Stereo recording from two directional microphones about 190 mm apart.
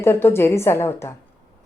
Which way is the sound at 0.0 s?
10° left (ahead or behind).